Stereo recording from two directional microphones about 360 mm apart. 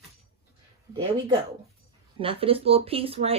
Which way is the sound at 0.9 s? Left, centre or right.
Centre.